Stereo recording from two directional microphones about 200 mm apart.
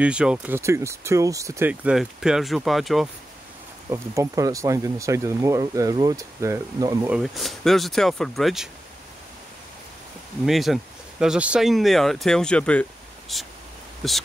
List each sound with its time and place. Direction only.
0.0 s speech: 5° right (ahead or behind)
3.9 s speech: 15° right (ahead or behind)
7.1 s speech: centre (ahead or behind)
10.4 s speech: centre (ahead or behind)